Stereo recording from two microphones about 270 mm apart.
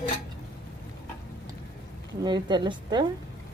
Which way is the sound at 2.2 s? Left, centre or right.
Centre.